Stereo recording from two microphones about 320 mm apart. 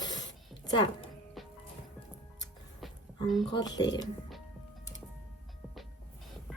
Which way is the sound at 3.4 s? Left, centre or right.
Centre.